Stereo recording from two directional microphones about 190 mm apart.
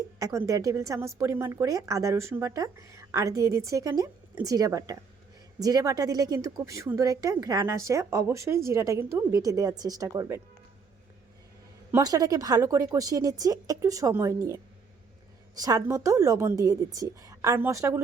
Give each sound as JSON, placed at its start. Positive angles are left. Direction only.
{"t": 0.2, "sound": "a woman's voice", "side_deg": -15}
{"t": 11.9, "sound": "speech", "side_deg": -15}